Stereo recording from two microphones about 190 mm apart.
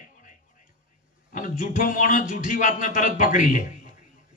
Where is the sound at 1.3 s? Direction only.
45° left (ahead or behind).